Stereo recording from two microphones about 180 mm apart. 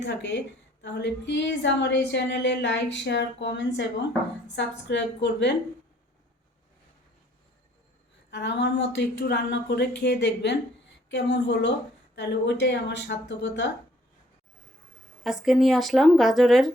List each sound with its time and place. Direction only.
0.0 s a woman's voice: 75° left (ahead or behind)
8.3 s a woman's voice: 70° left (ahead or behind)
15.2 s a woman's voice: centre (ahead or behind)